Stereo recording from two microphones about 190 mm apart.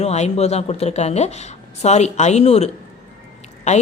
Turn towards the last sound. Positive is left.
turn(degrees=35)  # may be behind; listen again after turning